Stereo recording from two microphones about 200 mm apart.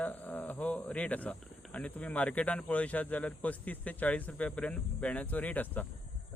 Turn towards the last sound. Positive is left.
turn(degrees=10)  # may be behind; listen again after turning